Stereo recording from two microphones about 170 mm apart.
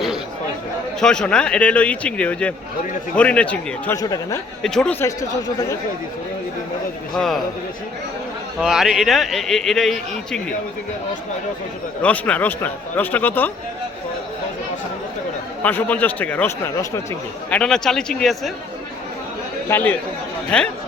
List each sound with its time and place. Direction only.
0.9 s speech: 5° left (ahead or behind)
3.9 s speech: 20° left (ahead or behind)
4.6 s a man's voice: 5° left (ahead or behind)
7.2 s a man's voice: centre (ahead or behind)
8.5 s a man's voice: 5° right (ahead or behind)
12.0 s speech: 10° left (ahead or behind)
15.6 s a man's voice: 10° left (ahead or behind)
19.6 s a man's voice: 10° left (ahead or behind)